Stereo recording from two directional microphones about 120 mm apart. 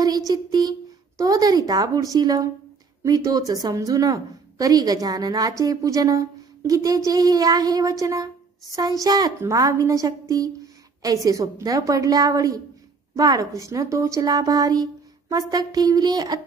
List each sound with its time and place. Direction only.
0.3 s a woman's voice: 35° right (ahead or behind)